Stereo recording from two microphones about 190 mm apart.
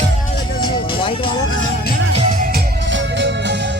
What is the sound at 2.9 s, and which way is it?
Music, 70° right (ahead or behind).